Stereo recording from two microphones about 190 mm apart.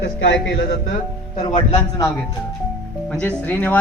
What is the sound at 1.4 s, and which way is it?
Speech, 25° left (ahead or behind).